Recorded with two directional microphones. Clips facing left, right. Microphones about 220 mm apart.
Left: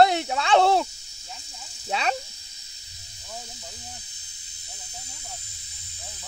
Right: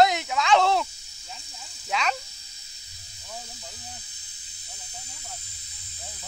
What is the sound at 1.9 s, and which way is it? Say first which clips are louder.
Speech: left 1 dB; 35° left (ahead or behind).